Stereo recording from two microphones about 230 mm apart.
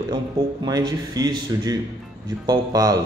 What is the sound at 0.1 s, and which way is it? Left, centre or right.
Speech, centre.